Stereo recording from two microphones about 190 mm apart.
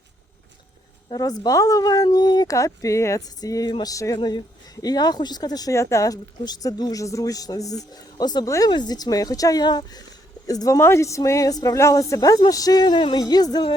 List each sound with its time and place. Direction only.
1.1 s speech: 20° left (ahead or behind)